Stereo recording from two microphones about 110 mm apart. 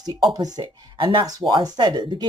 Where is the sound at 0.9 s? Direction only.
45° right (ahead or behind).